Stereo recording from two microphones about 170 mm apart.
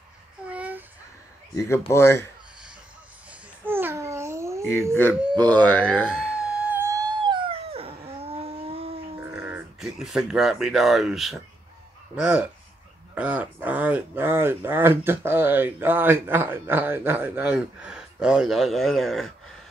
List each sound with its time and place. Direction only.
0.5 s babbling: 10° right (ahead or behind)
1.9 s speech: 15° left (ahead or behind)
3.6 s babbling: 15° right (ahead or behind)
5.4 s a sound: 10° left (ahead or behind); by 9.2 s 35° right (ahead or behind)
9.3 s speech: 5° right (ahead or behind)